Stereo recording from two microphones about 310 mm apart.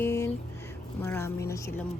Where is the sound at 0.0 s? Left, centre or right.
Centre.